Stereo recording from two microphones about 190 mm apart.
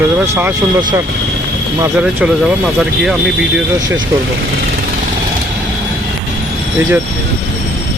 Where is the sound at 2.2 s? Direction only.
5° right (ahead or behind).